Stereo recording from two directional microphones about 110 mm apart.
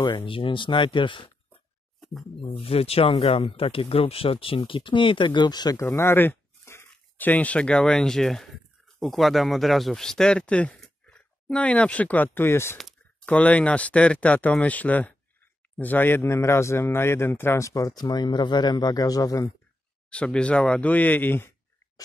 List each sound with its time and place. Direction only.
0.0 s speech: 50° left (ahead or behind)
2.5 s speech: 65° left (ahead or behind); by 5.8 s 40° left (ahead or behind)
5.8 s a man's voice: 25° left (ahead or behind)
20.1 s speech: 10° left (ahead or behind)